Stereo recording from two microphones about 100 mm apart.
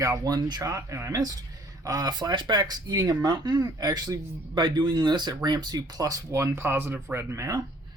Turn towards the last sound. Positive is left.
turn(degrees=-30)  # may be behind; listen again after turning